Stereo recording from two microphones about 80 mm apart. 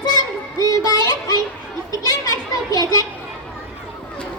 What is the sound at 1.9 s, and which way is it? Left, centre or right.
Children playing, left.